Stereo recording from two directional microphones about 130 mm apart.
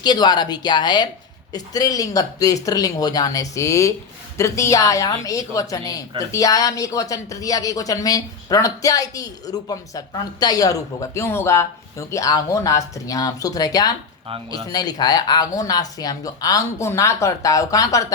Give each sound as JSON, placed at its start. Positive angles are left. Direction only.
{"t": 0.0, "sound": "a woman's voice", "side_deg": 35}